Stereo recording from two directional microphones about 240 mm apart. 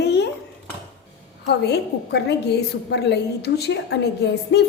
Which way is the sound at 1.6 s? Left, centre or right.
Left.